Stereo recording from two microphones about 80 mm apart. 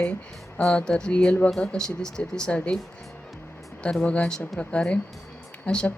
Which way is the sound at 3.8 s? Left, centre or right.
Centre.